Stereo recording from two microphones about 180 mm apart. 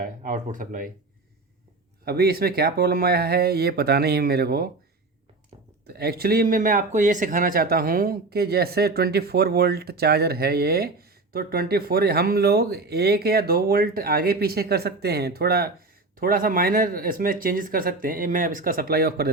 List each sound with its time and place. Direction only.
0.0 s speech: 45° right (ahead or behind)
2.0 s speech: 60° right (ahead or behind)
5.9 s speech: 60° right (ahead or behind)